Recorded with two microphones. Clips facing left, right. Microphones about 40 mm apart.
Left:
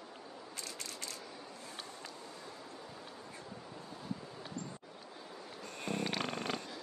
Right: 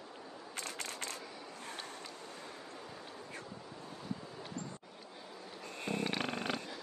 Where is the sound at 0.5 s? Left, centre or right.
Right.